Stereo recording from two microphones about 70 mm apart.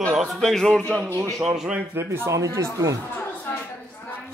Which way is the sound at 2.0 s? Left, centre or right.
Right.